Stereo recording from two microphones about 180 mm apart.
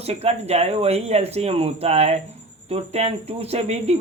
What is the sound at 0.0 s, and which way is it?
Speech, 35° right (ahead or behind).